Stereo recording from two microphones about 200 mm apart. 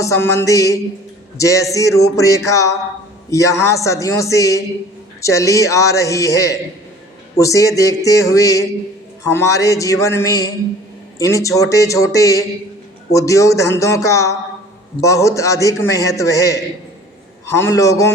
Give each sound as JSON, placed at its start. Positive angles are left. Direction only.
{"t": 0.0, "sound": "a man's voice", "side_deg": 15}
{"t": 17.6, "sound": "a man's voice", "side_deg": 15}